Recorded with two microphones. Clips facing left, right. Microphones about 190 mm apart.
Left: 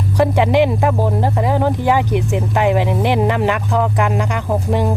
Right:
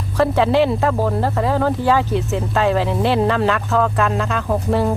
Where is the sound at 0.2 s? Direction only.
15° left (ahead or behind).